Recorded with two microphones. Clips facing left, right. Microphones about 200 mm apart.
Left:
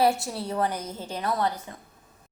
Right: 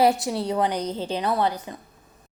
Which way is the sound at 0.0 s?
15° right (ahead or behind).